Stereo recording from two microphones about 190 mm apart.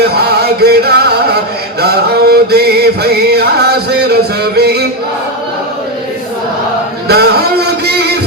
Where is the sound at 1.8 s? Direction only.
60° right (ahead or behind).